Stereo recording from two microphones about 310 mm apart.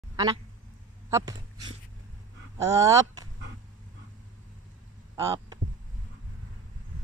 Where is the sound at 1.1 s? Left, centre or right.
Centre.